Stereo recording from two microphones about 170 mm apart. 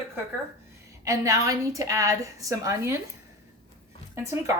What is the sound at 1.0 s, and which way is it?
A woman's voice, 20° right (ahead or behind).